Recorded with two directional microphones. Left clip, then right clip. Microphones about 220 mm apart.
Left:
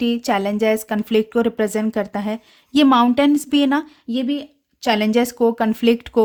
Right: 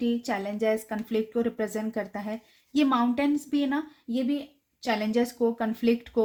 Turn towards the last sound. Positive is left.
turn(degrees=50)  # may be behind; listen again after turning